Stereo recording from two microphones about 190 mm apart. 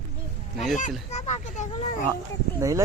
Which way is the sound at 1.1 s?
35° left (ahead or behind).